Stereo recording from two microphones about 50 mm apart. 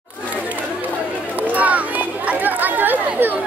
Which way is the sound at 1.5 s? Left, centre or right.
Right.